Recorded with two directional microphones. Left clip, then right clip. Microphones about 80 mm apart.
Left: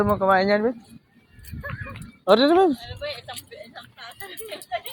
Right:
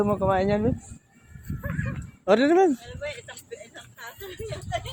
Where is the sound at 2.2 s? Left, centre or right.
Centre.